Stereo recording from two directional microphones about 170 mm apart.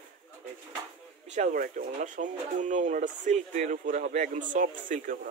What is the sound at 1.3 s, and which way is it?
Speech, 50° right (ahead or behind).